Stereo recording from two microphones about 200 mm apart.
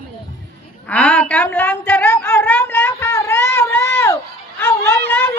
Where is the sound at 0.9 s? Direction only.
10° left (ahead or behind).